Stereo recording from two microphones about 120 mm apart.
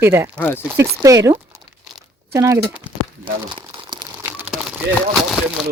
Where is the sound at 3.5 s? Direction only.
35° right (ahead or behind).